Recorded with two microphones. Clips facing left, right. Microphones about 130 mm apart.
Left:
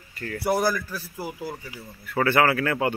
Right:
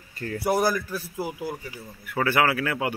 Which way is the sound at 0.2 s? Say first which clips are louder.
Even; 25° right (ahead or behind).